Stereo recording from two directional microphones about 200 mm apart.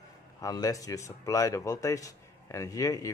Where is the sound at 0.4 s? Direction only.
15° left (ahead or behind).